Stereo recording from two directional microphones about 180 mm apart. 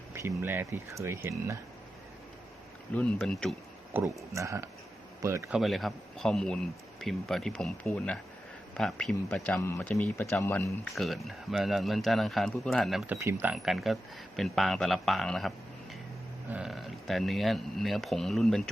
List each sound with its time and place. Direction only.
0.1 s speech: 15° right (ahead or behind)
2.9 s speech: 5° left (ahead or behind)
3.9 s speech: 15° right (ahead or behind)
5.5 s a man's voice: centre (ahead or behind); by 10.8 s 15° left (ahead or behind)
10.9 s speech: centre (ahead or behind)
13.1 s speech: 15° right (ahead or behind); by 18.7 s centre (ahead or behind)